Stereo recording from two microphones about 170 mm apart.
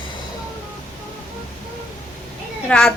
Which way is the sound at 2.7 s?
5° left (ahead or behind).